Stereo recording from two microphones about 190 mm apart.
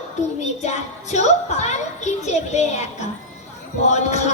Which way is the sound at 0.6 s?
35° left (ahead or behind).